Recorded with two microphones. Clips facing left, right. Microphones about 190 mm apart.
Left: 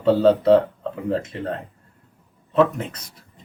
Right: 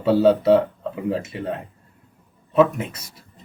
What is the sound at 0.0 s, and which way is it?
Speech, 10° right (ahead or behind).